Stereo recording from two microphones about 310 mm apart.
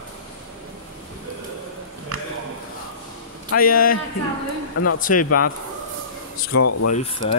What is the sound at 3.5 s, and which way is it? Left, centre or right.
Speech, left.